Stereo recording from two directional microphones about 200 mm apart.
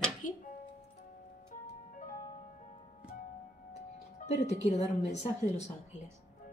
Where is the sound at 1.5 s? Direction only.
40° left (ahead or behind).